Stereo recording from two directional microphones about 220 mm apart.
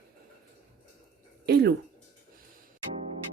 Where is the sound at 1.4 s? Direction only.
45° right (ahead or behind).